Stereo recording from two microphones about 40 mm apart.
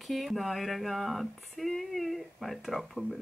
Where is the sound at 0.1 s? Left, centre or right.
Centre.